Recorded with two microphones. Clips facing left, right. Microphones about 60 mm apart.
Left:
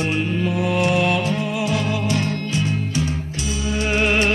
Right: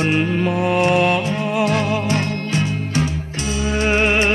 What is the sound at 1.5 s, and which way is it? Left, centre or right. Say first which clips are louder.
Music: right 4 dB; right.